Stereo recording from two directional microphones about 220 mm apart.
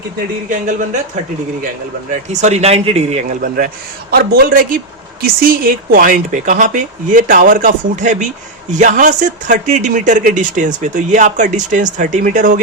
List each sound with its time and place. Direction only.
2.3 s speech: 30° right (ahead or behind)